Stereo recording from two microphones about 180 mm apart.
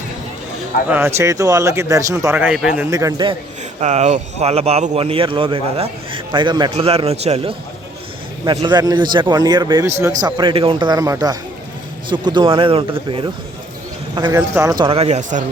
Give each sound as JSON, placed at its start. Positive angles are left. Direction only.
{"t": 0.9, "sound": "a man's voice", "side_deg": -10}
{"t": 2.9, "sound": "a man's voice", "side_deg": -20}
{"t": 3.8, "sound": "a man's voice", "side_deg": -40}
{"t": 8.4, "sound": "a man's voice", "side_deg": -25}
{"t": 14.2, "sound": "a man's voice", "side_deg": -15}